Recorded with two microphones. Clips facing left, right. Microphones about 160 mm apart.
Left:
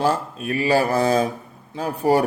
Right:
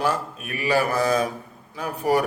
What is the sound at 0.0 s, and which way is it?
A man's voice, 30° left (ahead or behind).